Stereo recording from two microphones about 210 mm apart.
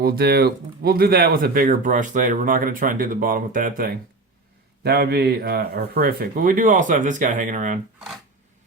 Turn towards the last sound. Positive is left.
turn(degrees=-35)  # may be behind; listen again after turning